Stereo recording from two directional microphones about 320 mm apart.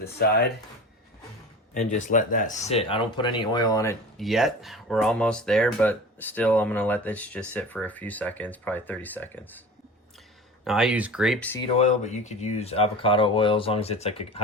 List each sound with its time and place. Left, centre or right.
0.0 s speech: left
1.7 s speech: left
4.2 s speech: centre
10.6 s speech: centre
11.8 s speech: left